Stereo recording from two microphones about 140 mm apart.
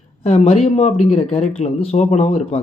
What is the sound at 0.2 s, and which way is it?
Speech, 45° left (ahead or behind).